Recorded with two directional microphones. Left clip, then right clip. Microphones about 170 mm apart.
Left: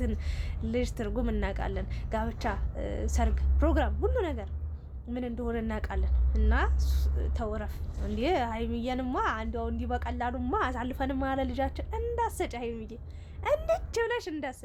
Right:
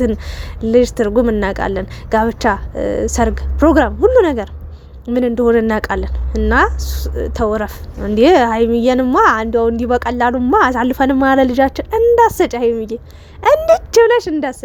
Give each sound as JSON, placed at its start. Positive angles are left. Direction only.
{"t": 0.0, "sound": "a woman's voice", "side_deg": -45}